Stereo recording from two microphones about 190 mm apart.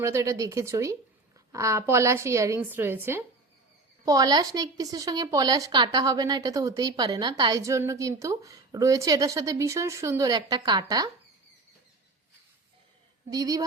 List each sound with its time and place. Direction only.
0.0 s a woman's voice: 15° right (ahead or behind)
13.3 s a woman's voice: 20° right (ahead or behind)